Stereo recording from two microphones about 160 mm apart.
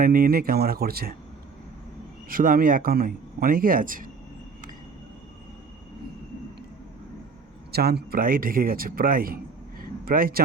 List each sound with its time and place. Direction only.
0.0 s speech: 65° right (ahead or behind)
2.3 s a man's voice: 60° right (ahead or behind)
7.7 s a man's voice: 80° right; by 10.4 s 65° right (ahead or behind)